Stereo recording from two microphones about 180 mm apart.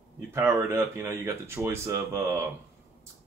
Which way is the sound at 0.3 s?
15° right (ahead or behind).